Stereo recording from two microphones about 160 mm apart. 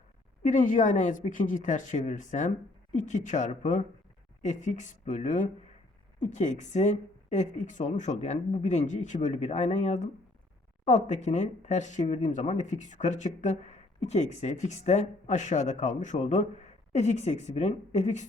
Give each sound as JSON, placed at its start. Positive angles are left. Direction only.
{"t": 0.4, "sound": "speech", "side_deg": 55}